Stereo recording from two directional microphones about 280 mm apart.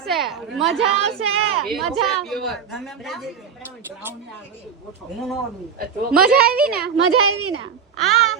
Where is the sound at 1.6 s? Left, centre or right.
Centre.